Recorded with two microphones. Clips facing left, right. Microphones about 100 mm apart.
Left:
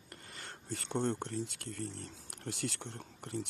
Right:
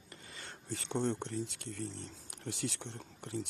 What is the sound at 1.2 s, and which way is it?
Speech, 50° left (ahead or behind).